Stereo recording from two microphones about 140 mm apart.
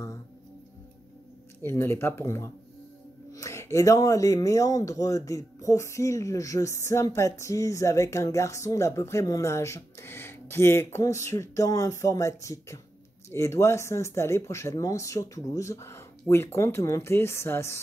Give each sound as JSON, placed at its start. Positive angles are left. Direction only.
{"t": 1.6, "sound": "speech", "side_deg": 20}